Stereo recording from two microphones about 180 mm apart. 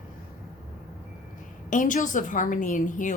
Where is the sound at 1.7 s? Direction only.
45° left (ahead or behind).